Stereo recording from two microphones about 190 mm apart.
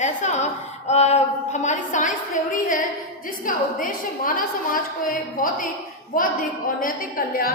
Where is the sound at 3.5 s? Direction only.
45° left (ahead or behind).